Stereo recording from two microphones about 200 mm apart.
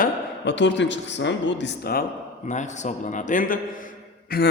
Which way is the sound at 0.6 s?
65° left (ahead or behind).